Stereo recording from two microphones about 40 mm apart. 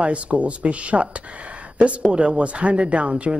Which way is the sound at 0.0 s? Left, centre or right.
Right.